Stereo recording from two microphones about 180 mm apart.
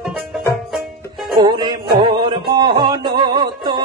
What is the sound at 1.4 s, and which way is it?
Music, 25° right (ahead or behind).